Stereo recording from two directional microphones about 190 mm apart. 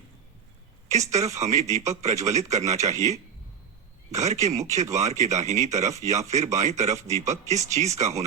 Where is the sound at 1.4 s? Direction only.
35° right (ahead or behind).